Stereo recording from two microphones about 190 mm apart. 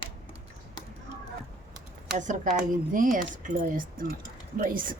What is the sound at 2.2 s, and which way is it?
Speech, 40° right (ahead or behind).